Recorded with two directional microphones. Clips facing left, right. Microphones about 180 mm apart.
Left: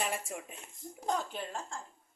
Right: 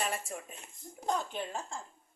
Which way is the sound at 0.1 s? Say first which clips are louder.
Even; 10° left (ahead or behind).